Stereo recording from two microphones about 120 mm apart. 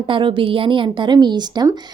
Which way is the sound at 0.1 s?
45° right (ahead or behind).